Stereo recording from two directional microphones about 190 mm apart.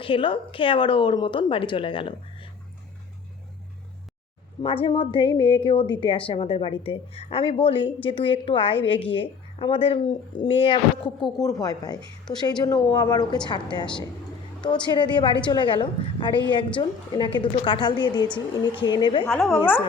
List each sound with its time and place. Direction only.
0.0 s a woman's voice: 25° left (ahead or behind)
4.6 s a woman's voice: 30° left (ahead or behind)
19.2 s a woman's voice: 5° left (ahead or behind)